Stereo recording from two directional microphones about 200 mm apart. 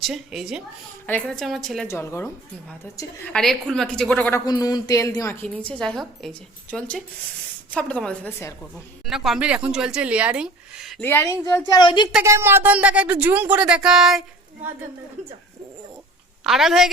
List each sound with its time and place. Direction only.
0.0 s speech: centre (ahead or behind)
1.9 s a woman's voice: 15° left (ahead or behind)
3.3 s a woman's voice: centre (ahead or behind)
9.0 s speech: centre (ahead or behind)
11.0 s a woman's voice: 10° left (ahead or behind)
12.1 s speech: 15° right (ahead or behind)
16.4 s speech: centre (ahead or behind)